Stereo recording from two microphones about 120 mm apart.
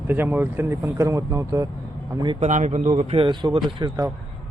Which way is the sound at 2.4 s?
80° right.